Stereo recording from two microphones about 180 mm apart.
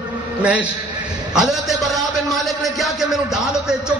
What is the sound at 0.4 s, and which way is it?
A man's voice, 5° right (ahead or behind).